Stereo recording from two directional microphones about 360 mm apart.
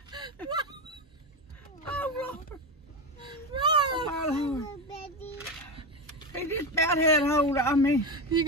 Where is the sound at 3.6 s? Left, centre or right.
Centre.